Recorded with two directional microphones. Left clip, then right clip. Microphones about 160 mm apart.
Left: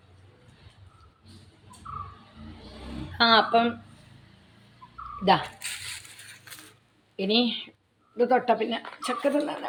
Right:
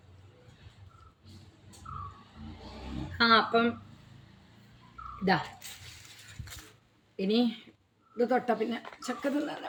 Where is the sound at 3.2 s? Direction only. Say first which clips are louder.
Left 4 dB; 20° right (ahead or behind).